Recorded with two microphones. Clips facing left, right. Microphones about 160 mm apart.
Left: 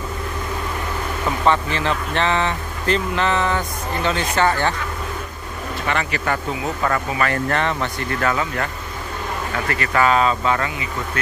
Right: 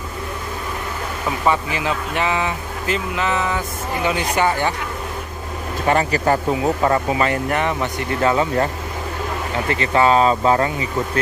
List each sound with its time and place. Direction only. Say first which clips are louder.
1.4 s speech: left 1 dB; 10° right (ahead or behind)
5.9 s speech: right 6 dB; 40° right (ahead or behind)
9.7 s speech: right 3 dB; 25° right (ahead or behind)